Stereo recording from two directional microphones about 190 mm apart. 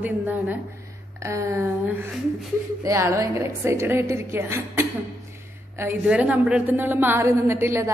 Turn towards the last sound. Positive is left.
turn(degrees=-15)  # may be behind; listen again after turning